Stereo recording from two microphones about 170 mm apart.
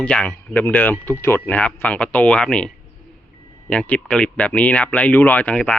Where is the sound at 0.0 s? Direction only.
5° left (ahead or behind).